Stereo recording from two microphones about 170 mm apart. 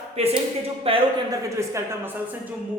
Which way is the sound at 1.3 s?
15° right (ahead or behind).